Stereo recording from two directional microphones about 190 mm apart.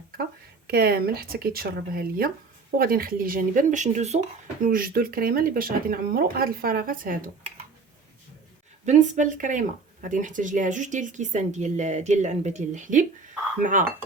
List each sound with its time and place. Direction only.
0.7 s speech: 55° right (ahead or behind)
8.9 s speech: 40° right (ahead or behind)